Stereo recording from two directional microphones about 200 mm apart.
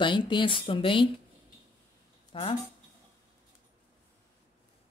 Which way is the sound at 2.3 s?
25° left (ahead or behind).